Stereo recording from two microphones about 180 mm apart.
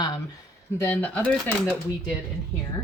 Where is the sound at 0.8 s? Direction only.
10° left (ahead or behind).